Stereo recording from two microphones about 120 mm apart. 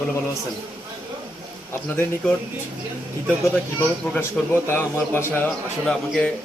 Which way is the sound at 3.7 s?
15° left (ahead or behind).